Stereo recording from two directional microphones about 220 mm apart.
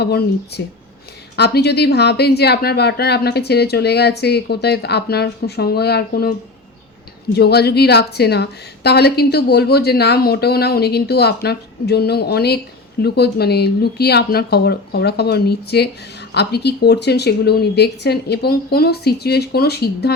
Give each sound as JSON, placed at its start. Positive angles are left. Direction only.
{"t": 0.0, "sound": "speech", "side_deg": 45}
{"t": 7.3, "sound": "speech", "side_deg": 45}